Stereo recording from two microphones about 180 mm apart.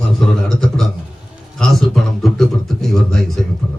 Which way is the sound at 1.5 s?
Centre (ahead or behind).